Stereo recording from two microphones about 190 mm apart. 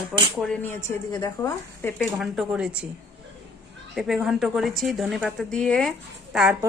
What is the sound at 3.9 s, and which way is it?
A woman's voice, centre (ahead or behind).